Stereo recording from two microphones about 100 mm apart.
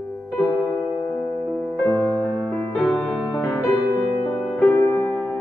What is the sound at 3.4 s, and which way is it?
Music, 25° left (ahead or behind).